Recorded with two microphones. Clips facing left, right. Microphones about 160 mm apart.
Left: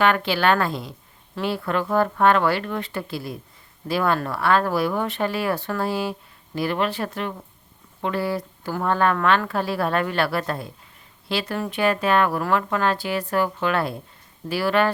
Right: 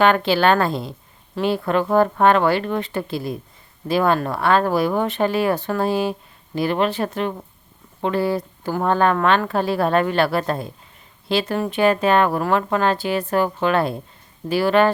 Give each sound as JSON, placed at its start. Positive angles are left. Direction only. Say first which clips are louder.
{"t": 0.0, "sound": "a woman's voice", "louder": "right 4 dB", "side_deg": -30}